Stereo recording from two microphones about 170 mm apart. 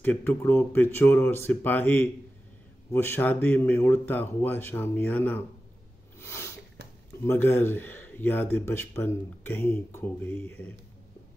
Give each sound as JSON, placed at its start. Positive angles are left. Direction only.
{"t": 0.0, "sound": "a man's voice", "side_deg": 10}
{"t": 6.1, "sound": "a sound", "side_deg": 15}
{"t": 7.2, "sound": "a man's voice", "side_deg": 15}